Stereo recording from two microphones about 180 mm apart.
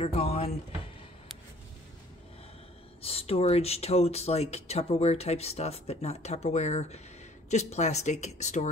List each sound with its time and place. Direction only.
0.0 s speech: 30° left (ahead or behind)
3.0 s speech: 35° left (ahead or behind)